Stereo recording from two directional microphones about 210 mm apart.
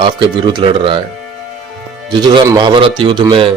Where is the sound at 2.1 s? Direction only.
20° right (ahead or behind).